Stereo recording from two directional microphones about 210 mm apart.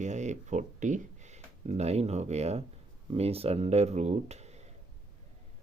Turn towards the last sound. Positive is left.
turn(degrees=-30)  # may be behind; listen again after turning